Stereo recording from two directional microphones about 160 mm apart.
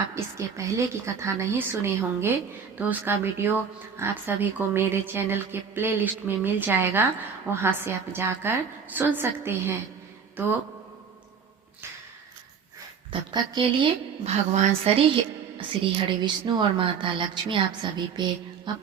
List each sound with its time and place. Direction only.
0.1 s speech: 20° right (ahead or behind)
13.1 s a woman's voice: 30° right (ahead or behind)
14.3 s a woman's voice: 45° right (ahead or behind); by 18.7 s 30° right (ahead or behind)